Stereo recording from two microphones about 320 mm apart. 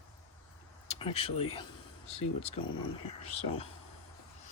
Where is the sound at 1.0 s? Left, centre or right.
Centre.